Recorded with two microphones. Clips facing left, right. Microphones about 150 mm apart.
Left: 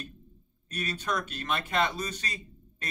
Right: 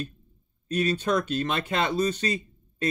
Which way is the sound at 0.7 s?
25° right (ahead or behind).